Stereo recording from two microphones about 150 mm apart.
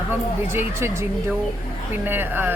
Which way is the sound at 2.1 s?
15° right (ahead or behind).